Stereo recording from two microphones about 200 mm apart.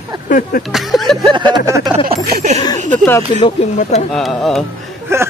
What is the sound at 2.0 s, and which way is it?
Speech, 35° right (ahead or behind).